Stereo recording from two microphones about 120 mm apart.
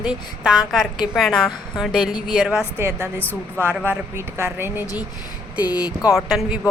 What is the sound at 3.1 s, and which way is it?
Speech, 15° left (ahead or behind).